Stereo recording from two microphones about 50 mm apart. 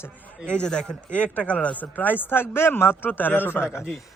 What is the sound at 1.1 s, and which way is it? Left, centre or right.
Speech, left.